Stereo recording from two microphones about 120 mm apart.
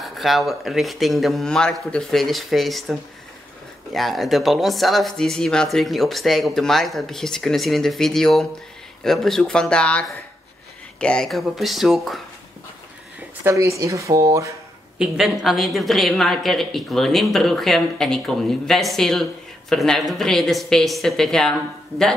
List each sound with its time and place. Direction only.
0.0 s speech: centre (ahead or behind)
13.4 s speech: 25° right (ahead or behind)
15.0 s speech: centre (ahead or behind)